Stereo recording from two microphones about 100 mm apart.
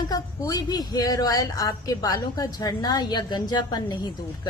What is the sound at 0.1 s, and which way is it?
A woman's voice, 40° left (ahead or behind).